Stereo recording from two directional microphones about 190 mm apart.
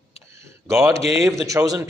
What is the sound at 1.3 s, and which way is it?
Speech, 15° right (ahead or behind).